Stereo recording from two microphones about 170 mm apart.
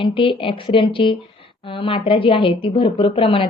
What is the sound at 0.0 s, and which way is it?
A woman's voice, 30° left (ahead or behind).